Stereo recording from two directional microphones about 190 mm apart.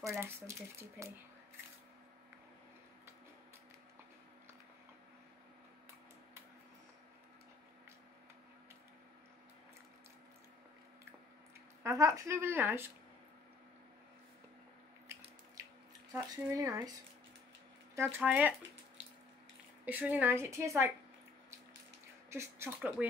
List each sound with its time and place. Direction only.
0.0 s a woman's voice: 15° right (ahead or behind)
11.8 s a woman's voice: 15° right (ahead or behind)
16.2 s a woman's voice: 15° right (ahead or behind)
17.9 s a woman's voice: 10° right (ahead or behind)
19.8 s a woman's voice: 10° right (ahead or behind)
22.3 s a woman's voice: 15° right (ahead or behind)